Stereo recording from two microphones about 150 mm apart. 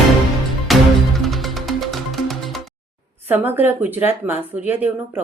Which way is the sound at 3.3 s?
10° right (ahead or behind).